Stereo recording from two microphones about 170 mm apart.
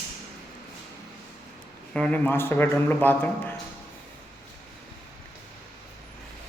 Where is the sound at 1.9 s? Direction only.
5° left (ahead or behind).